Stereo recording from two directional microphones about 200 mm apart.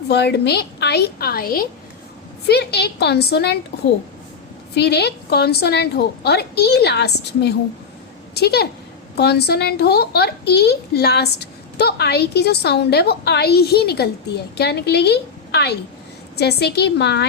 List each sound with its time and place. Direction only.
0.1 s a woman's voice: 55° left (ahead or behind)